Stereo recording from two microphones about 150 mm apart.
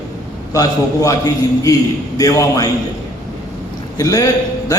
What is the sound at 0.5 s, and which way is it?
A man's voice, 25° left (ahead or behind).